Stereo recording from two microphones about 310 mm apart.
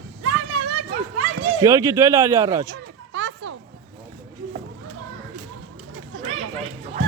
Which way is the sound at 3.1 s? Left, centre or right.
Right.